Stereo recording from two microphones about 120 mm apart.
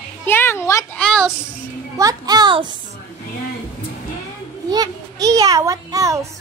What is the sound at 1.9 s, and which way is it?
Speech, 30° right (ahead or behind).